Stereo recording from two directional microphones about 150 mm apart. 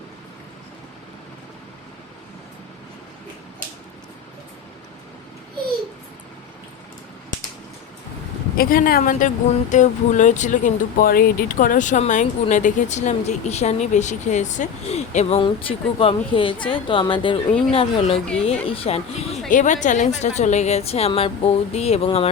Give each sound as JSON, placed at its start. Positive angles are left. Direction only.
{"t": 8.5, "sound": "speech", "side_deg": 75}
{"t": 19.5, "sound": "a woman's voice", "side_deg": 60}